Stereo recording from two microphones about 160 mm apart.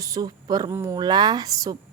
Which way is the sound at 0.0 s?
25° right (ahead or behind).